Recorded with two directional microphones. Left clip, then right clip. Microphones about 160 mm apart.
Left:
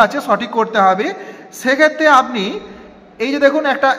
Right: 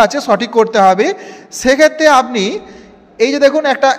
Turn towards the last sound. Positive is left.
turn(degrees=-45)  # may be behind; listen again after turning